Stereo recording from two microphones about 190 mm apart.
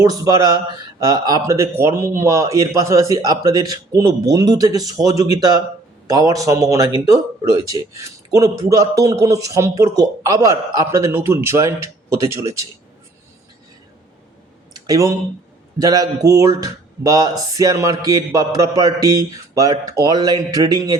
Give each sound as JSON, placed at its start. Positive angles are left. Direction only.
{"t": 0.0, "sound": "speech", "side_deg": -20}
{"t": 14.8, "sound": "speech", "side_deg": -20}